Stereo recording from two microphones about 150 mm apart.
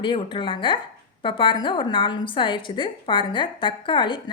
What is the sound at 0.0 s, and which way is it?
A woman's voice, 35° left (ahead or behind).